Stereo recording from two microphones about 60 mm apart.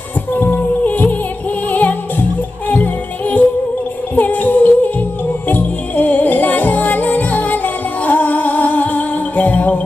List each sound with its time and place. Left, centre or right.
0.3 s music: left